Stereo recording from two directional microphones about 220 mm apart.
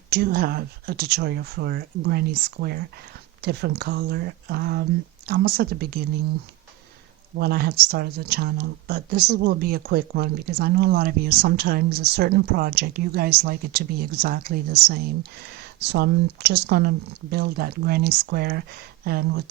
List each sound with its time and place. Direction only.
0.1 s speech: 45° right (ahead or behind)
7.3 s speech: 45° right (ahead or behind)